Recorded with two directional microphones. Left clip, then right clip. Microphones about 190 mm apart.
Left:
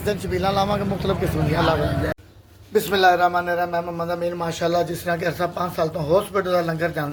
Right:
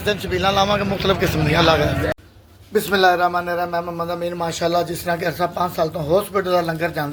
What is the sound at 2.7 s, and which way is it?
A man's voice, centre (ahead or behind).